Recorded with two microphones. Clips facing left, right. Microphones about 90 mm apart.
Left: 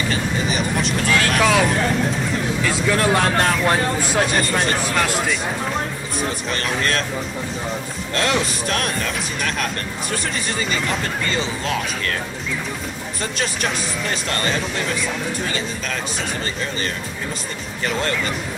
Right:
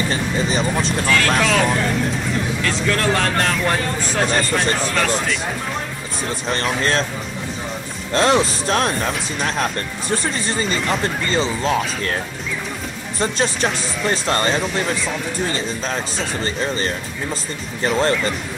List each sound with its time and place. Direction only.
0.1 s vehicle: 30° right (ahead or behind)
1.4 s speech: 10° left (ahead or behind)
6.8 s speech: 30° right (ahead or behind)
8.1 s speech: 30° right (ahead or behind)
11.2 s speech: 35° right (ahead or behind)
13.2 s speech: 30° right (ahead or behind)
17.8 s speech: 30° right (ahead or behind)